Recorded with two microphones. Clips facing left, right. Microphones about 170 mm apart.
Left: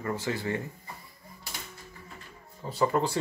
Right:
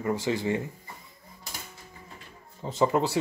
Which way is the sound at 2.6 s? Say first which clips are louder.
Right 2 dB; 20° right (ahead or behind).